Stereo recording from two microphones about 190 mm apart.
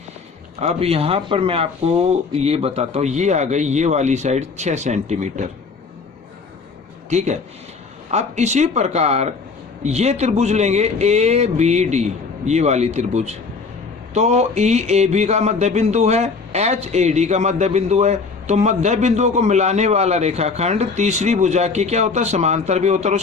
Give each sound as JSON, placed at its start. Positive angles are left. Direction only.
{"t": 0.6, "sound": "a man's voice", "side_deg": -30}
{"t": 7.1, "sound": "a man's voice", "side_deg": -40}